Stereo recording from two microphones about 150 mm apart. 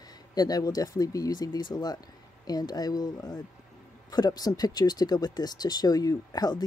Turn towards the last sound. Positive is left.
turn(degrees=25)  # may be behind; listen again after turning